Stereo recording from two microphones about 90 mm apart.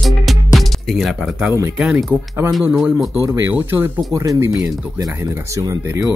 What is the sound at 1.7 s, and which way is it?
Speech, 10° right (ahead or behind).